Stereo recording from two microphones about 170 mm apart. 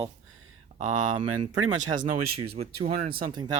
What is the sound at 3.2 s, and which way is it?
Speech, 25° right (ahead or behind).